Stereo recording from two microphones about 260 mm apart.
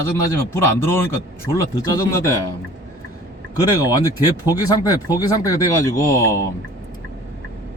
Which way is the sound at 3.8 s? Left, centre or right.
Centre.